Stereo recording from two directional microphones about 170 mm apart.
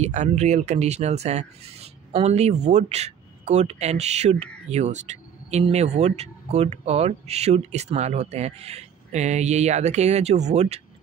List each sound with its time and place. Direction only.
0.0 s speech: 45° right (ahead or behind)